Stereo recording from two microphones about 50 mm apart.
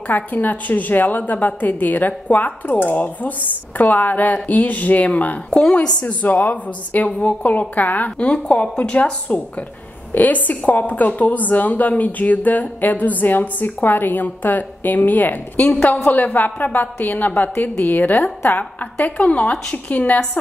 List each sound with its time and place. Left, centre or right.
0.1 s a woman's voice: left
5.5 s a woman's voice: centre
6.2 s a woman's voice: left